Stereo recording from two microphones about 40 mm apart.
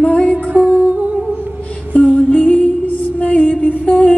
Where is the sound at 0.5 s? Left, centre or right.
Right.